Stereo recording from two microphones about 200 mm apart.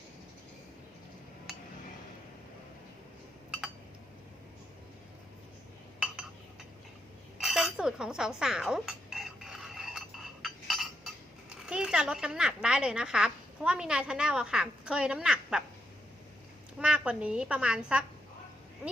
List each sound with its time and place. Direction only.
1.5 s a sound: 5° right (ahead or behind)
7.3 s dishes: centre (ahead or behind)
10.4 s chink: centre (ahead or behind)
12.6 s a woman's voice: 5° right (ahead or behind)
16.7 s a woman's voice: 5° right (ahead or behind)